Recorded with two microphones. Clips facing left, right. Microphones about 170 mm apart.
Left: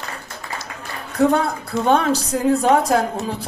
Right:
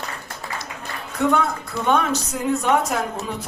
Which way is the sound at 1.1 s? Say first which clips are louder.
Left 3 dB; 35° left (ahead or behind).